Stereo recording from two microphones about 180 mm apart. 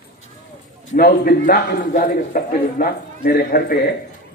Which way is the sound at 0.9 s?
60° left (ahead or behind).